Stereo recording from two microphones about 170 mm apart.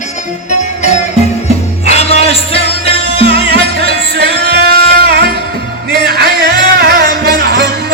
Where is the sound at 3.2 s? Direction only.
75° right (ahead or behind).